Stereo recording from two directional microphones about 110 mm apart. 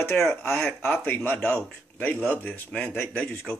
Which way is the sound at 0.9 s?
15° left (ahead or behind).